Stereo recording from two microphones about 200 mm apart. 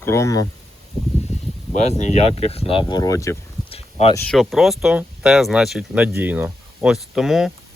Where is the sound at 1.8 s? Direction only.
35° left (ahead or behind); by 3.4 s 15° left (ahead or behind).